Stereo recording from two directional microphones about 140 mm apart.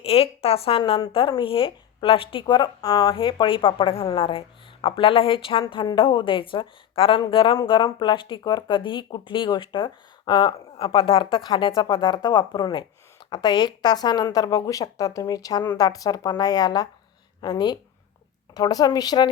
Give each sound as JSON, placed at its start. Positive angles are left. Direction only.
{"t": 0.0, "sound": "a woman's voice", "side_deg": 45}
{"t": 3.2, "sound": "a woman's voice", "side_deg": 40}